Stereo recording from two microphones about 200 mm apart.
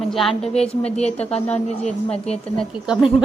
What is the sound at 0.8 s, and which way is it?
Speech, 30° left (ahead or behind).